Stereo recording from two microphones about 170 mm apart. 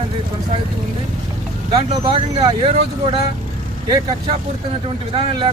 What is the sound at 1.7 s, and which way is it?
Speech, 30° right (ahead or behind).